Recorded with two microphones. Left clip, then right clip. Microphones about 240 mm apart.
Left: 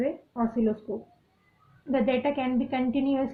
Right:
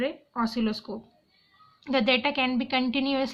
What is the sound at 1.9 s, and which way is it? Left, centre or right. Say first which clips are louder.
A woman's voice: right 2 dB; centre.